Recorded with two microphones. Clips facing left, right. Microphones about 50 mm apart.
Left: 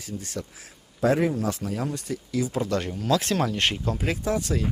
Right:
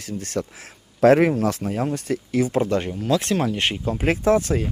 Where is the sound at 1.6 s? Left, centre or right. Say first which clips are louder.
Right 5 dB; right.